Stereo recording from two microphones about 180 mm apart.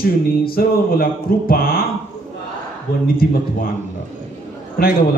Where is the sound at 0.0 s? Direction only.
55° left (ahead or behind).